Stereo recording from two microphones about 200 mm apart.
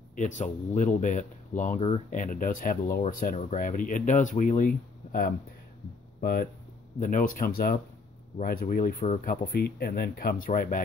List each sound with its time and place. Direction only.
0.4 s speech: 40° left (ahead or behind)
7.0 s speech: 40° left (ahead or behind)